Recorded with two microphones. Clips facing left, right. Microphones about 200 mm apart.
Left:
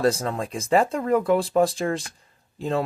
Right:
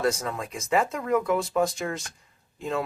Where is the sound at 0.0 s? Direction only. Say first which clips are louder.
Left 4 dB; 30° left (ahead or behind).